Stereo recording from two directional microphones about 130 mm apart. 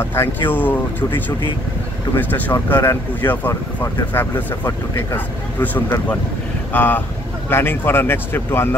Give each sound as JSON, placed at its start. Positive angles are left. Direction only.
{"t": 0.0, "sound": "speech", "side_deg": 20}